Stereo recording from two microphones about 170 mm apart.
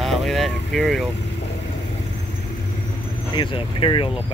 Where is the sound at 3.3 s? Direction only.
30° left (ahead or behind).